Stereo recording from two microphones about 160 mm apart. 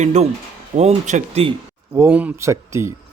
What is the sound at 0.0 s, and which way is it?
Speech, 45° right (ahead or behind).